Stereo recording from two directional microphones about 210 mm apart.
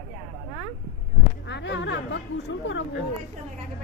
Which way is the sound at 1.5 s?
55° left (ahead or behind).